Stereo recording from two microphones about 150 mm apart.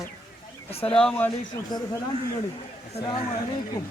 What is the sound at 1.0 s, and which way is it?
Speech, 10° left (ahead or behind).